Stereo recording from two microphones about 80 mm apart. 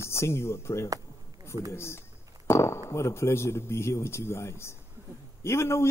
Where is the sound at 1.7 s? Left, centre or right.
Left.